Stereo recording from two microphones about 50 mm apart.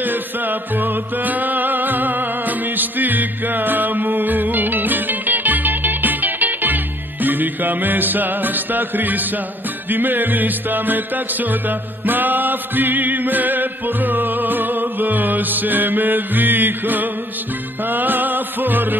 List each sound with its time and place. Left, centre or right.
0.0 s music: right